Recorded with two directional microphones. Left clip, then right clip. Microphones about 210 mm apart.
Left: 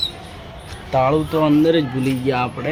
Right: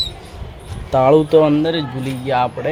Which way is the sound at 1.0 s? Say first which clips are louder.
Right 8 dB; 35° right (ahead or behind).